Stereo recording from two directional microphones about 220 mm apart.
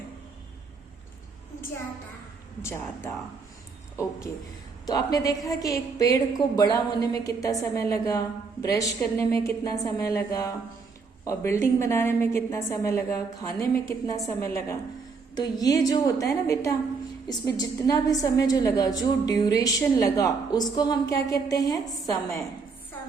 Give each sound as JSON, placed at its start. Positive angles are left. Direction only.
{"t": 2.6, "sound": "a woman's voice", "side_deg": 10}
{"t": 4.9, "sound": "a woman's voice", "side_deg": 15}